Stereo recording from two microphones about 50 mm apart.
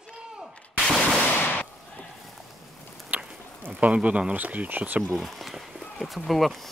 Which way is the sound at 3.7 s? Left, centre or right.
Right.